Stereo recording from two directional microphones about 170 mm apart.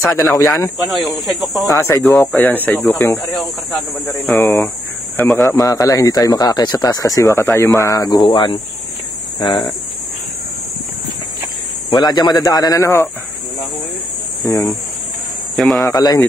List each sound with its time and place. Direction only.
0.1 s speech: 5° left (ahead or behind)
1.7 s speech: 15° left (ahead or behind)
2.0 s speech: 5° left (ahead or behind)
5.6 s speech: 20° left (ahead or behind)
11.9 s speech: 25° left (ahead or behind)
14.4 s speech: 20° left (ahead or behind)
15.5 s speech: centre (ahead or behind)
15.8 s speech: 20° left (ahead or behind)